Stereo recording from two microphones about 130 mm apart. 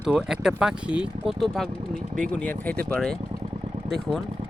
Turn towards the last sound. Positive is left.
turn(degrees=0)  # may be behind; listen again after turning